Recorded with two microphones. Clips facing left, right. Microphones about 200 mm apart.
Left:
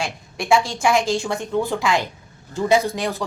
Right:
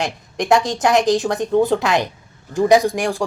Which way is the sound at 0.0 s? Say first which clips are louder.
Right 5 dB; 20° right (ahead or behind).